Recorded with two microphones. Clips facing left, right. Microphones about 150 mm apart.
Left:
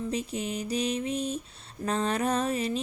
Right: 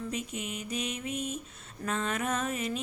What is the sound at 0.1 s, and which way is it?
A woman's voice, 35° left (ahead or behind).